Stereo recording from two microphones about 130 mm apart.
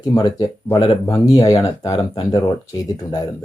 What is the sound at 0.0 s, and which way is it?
Speech, 30° left (ahead or behind).